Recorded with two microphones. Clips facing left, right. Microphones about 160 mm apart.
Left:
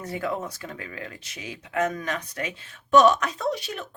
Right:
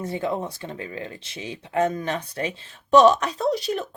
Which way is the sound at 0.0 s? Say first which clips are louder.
Right 3 dB; 25° right (ahead or behind).